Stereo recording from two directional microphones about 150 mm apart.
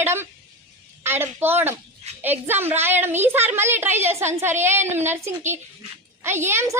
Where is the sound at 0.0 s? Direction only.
15° right (ahead or behind).